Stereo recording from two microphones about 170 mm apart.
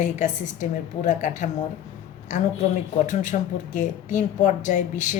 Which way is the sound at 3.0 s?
45° left (ahead or behind).